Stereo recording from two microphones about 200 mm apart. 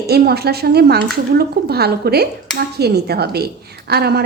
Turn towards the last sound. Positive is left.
turn(degrees=-55)  # may be behind; listen again after turning